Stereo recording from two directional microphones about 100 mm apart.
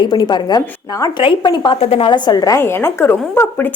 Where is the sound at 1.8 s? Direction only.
75° left (ahead or behind); by 2.5 s 40° left (ahead or behind).